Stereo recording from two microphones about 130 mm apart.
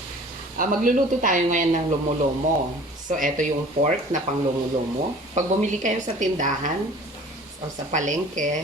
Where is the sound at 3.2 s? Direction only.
70° right (ahead or behind).